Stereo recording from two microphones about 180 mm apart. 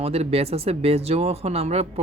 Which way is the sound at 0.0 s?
35° right (ahead or behind).